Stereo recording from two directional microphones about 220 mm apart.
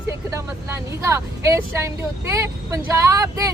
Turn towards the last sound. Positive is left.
turn(degrees=-15)  # may be behind; listen again after turning